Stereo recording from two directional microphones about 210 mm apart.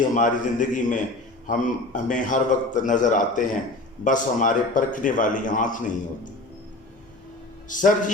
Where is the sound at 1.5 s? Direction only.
35° left (ahead or behind).